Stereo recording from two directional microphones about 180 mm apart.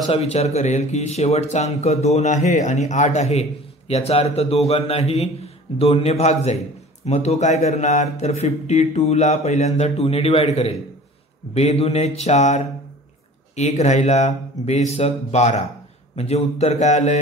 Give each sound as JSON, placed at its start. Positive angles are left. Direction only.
{"t": 0.1, "sound": "speech", "side_deg": 35}